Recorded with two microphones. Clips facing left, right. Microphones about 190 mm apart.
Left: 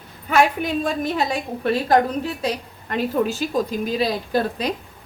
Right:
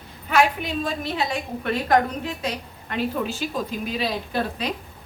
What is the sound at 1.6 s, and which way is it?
Speech, 35° left (ahead or behind).